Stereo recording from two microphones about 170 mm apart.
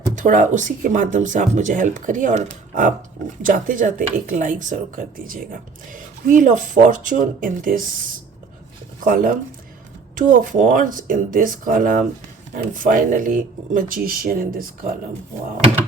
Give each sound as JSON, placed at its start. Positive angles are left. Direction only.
{"t": 0.2, "sound": "speech", "side_deg": -50}